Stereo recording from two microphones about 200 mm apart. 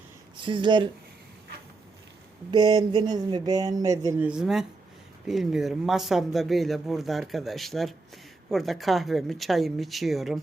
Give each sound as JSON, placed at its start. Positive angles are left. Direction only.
{"t": 0.4, "sound": "speech", "side_deg": -25}
{"t": 2.5, "sound": "speech", "side_deg": -20}